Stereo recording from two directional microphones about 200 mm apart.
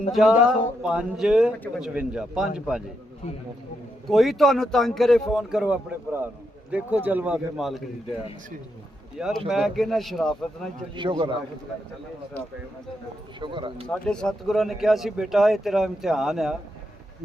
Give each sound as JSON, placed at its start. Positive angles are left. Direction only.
{"t": 0.1, "sound": "speech", "side_deg": 0}
{"t": 1.5, "sound": "speech", "side_deg": 10}
{"t": 1.8, "sound": "speech", "side_deg": -5}
{"t": 4.1, "sound": "speech", "side_deg": 0}
{"t": 9.1, "sound": "speech", "side_deg": 0}
{"t": 10.9, "sound": "speech", "side_deg": -25}
{"t": 13.4, "sound": "speech", "side_deg": -25}
{"t": 13.8, "sound": "speech", "side_deg": 5}